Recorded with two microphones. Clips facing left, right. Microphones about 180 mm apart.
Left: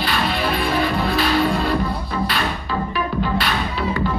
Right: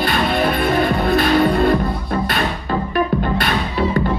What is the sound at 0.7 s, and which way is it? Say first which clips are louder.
Music: right 4 dB; 50° right (ahead or behind).